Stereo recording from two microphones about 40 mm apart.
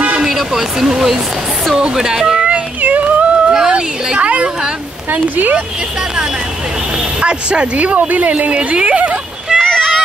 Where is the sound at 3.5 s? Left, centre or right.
Centre.